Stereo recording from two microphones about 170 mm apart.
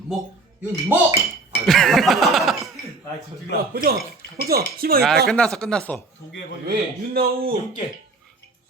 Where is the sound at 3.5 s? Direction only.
65° right (ahead or behind).